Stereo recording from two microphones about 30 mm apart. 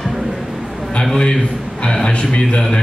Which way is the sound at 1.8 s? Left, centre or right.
Left.